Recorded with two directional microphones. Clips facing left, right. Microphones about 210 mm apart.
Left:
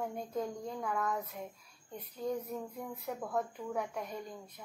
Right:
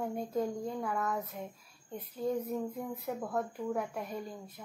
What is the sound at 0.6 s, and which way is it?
A woman's voice, 5° right (ahead or behind).